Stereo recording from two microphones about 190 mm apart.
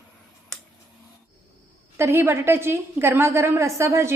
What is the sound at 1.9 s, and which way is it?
A woman's voice, 15° right (ahead or behind).